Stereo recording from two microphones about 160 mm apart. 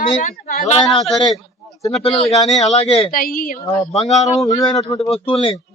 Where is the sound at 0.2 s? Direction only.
65° left (ahead or behind).